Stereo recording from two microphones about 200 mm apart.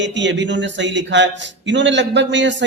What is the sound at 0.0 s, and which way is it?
A man's voice, 65° right (ahead or behind).